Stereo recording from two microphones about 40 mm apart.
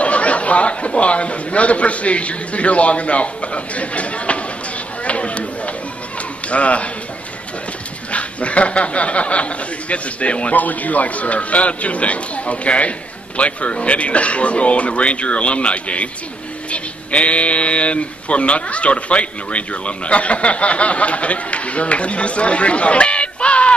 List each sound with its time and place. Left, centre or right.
0.0 s a man's voice: left
5.0 s chop: left
6.5 s speech: left
8.1 s speech: left